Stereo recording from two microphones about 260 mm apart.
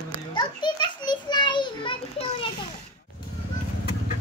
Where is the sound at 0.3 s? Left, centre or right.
Centre.